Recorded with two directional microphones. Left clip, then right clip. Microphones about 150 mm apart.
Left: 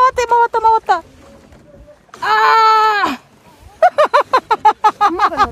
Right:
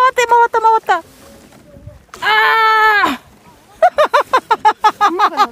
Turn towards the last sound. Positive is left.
turn(degrees=-15)  # may be behind; listen again after turning